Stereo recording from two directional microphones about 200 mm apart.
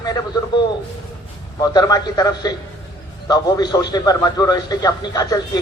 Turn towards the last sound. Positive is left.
turn(degrees=20)  # may be behind; listen again after turning